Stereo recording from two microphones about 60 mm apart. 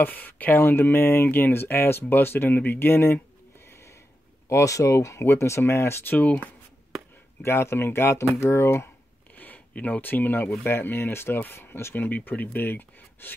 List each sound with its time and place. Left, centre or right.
0.0 s speech: left
3.6 s a sound: left
4.5 s speech: left
6.0 s speech: left
7.4 s speech: left
9.3 s speech: left